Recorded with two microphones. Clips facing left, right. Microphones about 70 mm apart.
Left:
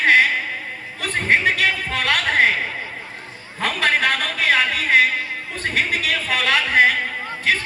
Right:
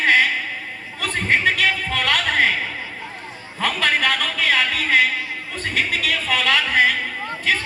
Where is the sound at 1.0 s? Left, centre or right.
Left.